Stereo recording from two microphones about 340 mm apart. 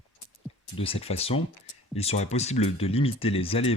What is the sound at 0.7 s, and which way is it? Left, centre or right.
Speech, centre.